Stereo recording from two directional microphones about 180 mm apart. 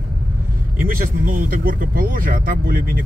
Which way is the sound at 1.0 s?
50° right (ahead or behind).